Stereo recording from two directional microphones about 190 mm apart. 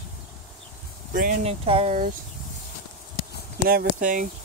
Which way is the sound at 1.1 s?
45° right (ahead or behind).